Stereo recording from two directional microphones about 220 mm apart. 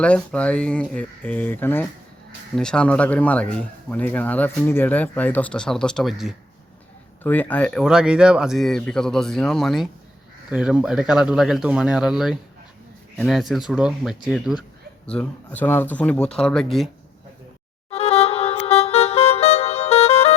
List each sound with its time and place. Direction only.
0.0 s speech: 5° left (ahead or behind)
17.9 s music: 30° left (ahead or behind)